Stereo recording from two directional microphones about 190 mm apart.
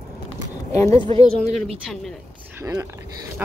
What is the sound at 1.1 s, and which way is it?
Speech, 30° right (ahead or behind).